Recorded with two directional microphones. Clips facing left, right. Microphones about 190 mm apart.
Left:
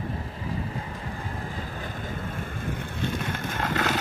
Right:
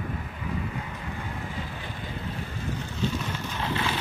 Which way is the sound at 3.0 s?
55° left (ahead or behind).